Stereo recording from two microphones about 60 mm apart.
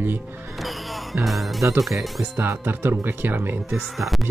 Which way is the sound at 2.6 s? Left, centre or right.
Right.